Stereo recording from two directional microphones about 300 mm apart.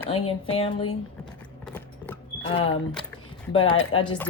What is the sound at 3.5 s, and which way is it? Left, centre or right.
Speech, centre.